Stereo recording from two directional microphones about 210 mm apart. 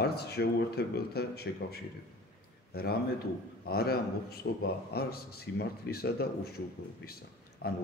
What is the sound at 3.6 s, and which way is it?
A man's voice, 50° left (ahead or behind).